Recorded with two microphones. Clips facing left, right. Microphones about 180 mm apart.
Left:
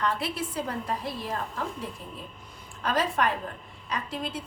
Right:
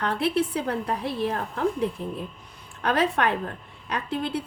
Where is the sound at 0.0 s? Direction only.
60° right (ahead or behind).